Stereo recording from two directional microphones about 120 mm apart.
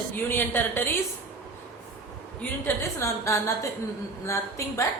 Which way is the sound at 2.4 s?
20° left (ahead or behind).